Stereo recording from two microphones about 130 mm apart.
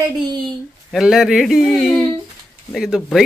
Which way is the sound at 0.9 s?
5° right (ahead or behind).